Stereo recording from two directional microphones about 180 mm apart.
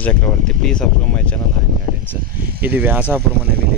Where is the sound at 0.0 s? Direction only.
5° left (ahead or behind).